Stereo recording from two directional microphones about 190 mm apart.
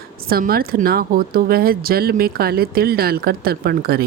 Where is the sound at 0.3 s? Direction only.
50° right (ahead or behind).